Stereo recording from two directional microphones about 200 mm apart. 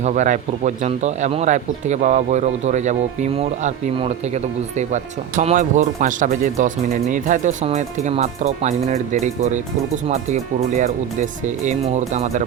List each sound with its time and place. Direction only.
0.0 s speech: 35° right (ahead or behind)
5.4 s speech: 40° right (ahead or behind)